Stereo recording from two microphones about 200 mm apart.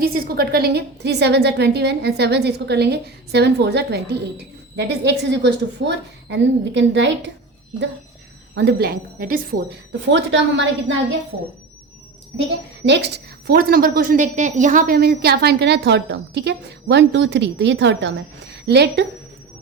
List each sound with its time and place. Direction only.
0.0 s a woman's voice: 50° right (ahead or behind)
8.5 s a woman's voice: 55° right (ahead or behind)
10.1 s a woman's voice: 65° right (ahead or behind)
12.8 s a woman's voice: 60° right (ahead or behind)